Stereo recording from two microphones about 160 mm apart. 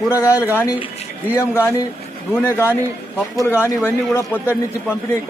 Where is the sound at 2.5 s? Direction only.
15° left (ahead or behind).